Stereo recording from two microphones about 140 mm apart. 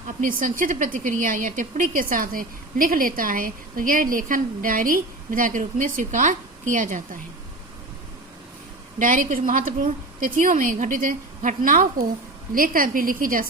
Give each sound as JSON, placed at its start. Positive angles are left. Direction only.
{"t": 0.2, "sound": "speech", "side_deg": -75}
{"t": 9.0, "sound": "a woman's voice", "side_deg": -75}